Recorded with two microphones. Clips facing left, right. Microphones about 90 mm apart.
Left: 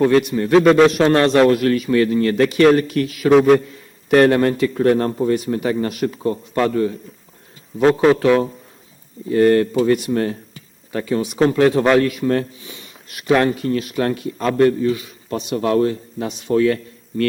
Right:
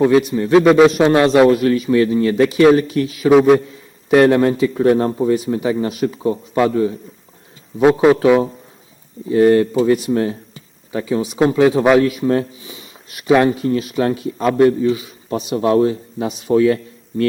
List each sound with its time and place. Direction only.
0.0 s a man's voice: 5° right (ahead or behind)